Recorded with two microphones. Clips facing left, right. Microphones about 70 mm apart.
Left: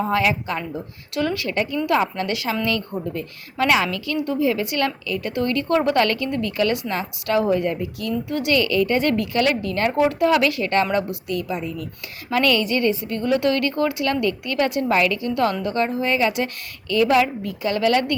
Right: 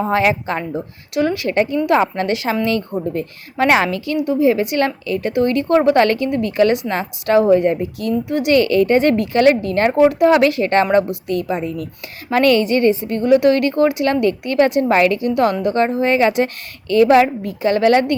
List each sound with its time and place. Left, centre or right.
0.0 s a woman's voice: right
1.5 s a woman's voice: right
3.8 s a woman's voice: right
8.5 s a woman's voice: right
10.0 s a woman's voice: centre
10.2 s a woman's voice: right
15.2 s a woman's voice: right